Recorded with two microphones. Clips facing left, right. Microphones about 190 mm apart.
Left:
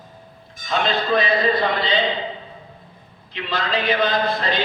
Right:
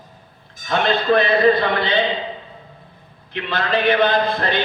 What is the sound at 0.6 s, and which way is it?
Speech, 60° right (ahead or behind).